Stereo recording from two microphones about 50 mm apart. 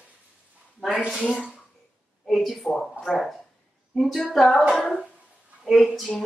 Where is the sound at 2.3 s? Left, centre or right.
Centre.